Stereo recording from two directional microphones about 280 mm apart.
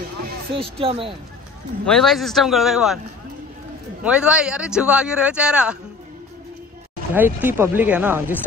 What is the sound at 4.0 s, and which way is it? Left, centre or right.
A man's voice, centre.